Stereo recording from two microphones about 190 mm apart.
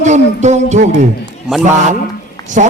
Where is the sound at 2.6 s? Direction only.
45° right (ahead or behind).